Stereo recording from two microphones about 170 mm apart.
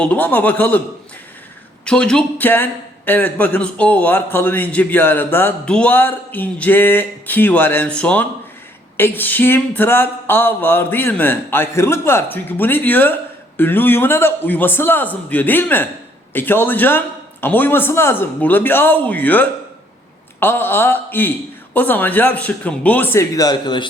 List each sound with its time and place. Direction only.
0.0 s a man's voice: 10° left (ahead or behind)
1.8 s a man's voice: 5° left (ahead or behind); by 23.9 s 25° left (ahead or behind)